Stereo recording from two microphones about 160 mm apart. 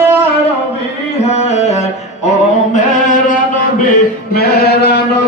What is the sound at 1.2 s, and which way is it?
Music, 45° left (ahead or behind).